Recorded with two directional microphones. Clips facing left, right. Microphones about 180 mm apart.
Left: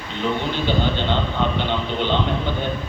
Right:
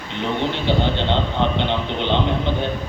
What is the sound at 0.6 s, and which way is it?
A man's voice, 20° right (ahead or behind).